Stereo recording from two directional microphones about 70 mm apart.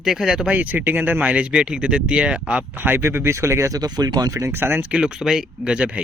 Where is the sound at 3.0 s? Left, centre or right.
Right.